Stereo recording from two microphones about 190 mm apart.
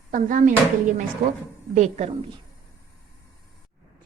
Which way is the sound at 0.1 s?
45° right (ahead or behind).